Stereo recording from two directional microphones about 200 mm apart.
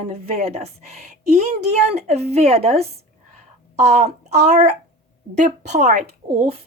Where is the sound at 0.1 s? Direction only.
30° right (ahead or behind).